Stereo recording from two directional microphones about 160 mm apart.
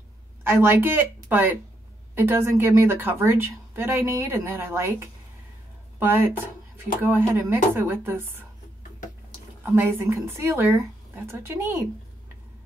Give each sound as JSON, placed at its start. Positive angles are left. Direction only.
{"t": 0.4, "sound": "speech", "side_deg": -15}
{"t": 9.6, "sound": "speech", "side_deg": -15}